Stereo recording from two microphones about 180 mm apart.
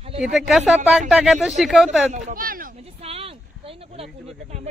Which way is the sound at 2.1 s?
45° right (ahead or behind).